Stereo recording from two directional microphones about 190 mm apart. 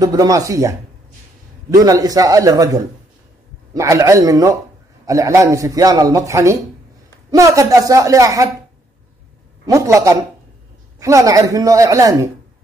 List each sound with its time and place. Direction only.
0.0 s a man's voice: 20° right (ahead or behind)
1.8 s a man's voice: 20° right (ahead or behind)
9.7 s a man's voice: 15° right (ahead or behind)